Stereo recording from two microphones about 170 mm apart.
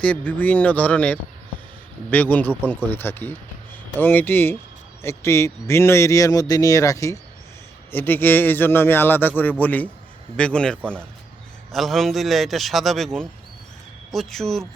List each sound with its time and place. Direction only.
0.0 s a man's voice: 10° left (ahead or behind)